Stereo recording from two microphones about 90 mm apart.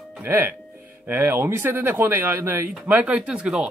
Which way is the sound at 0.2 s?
25° right (ahead or behind).